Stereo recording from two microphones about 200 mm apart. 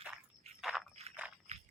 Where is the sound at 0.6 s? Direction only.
Centre (ahead or behind).